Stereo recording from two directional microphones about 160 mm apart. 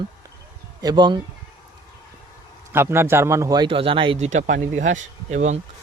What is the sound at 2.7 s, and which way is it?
A man's voice, 15° right (ahead or behind).